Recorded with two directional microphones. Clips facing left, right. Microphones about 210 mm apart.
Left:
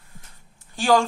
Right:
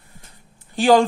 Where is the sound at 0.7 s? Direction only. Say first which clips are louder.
Right 5 dB; 20° right (ahead or behind).